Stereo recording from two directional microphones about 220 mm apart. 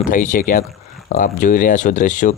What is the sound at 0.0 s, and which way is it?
Speech, 35° left (ahead or behind).